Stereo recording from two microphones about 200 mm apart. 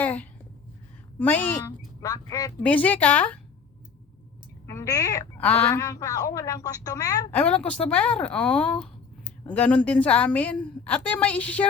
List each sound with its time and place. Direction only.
0.0 s a sound: 10° left (ahead or behind)
1.2 s a woman's voice: 10° left (ahead or behind)
2.6 s a woman's voice: 5° left (ahead or behind)
4.6 s a woman's voice: 15° left (ahead or behind)
7.3 s a woman's voice: 5° left (ahead or behind)